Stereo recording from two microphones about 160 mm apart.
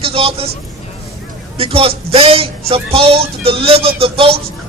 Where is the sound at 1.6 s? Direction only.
35° right (ahead or behind).